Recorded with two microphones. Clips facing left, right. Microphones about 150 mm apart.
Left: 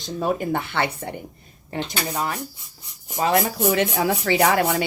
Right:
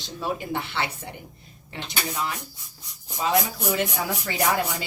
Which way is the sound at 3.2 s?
55° left (ahead or behind).